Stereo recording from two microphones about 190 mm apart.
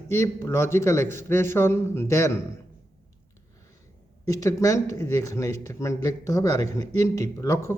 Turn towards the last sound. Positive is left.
turn(degrees=15)  # may be behind; listen again after turning